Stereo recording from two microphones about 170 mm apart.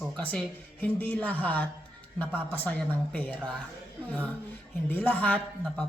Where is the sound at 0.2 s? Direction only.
10° left (ahead or behind).